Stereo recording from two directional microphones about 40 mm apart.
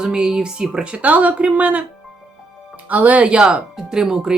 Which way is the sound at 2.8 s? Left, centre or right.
Right.